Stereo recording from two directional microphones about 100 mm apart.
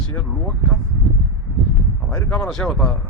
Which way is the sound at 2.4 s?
5° left (ahead or behind).